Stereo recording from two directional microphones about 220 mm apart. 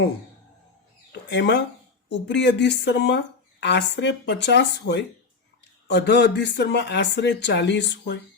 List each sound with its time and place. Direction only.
1.3 s speech: 55° left (ahead or behind)